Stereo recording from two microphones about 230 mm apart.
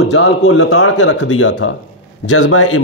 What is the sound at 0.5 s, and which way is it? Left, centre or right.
Speech, left.